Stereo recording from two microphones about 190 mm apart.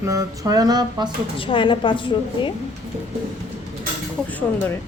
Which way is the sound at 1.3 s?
25° left (ahead or behind).